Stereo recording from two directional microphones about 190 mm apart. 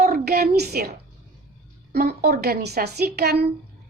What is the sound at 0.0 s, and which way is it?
Speech, 55° right (ahead or behind).